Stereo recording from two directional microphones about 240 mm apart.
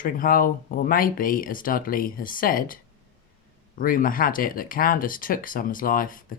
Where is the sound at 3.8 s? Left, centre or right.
Left.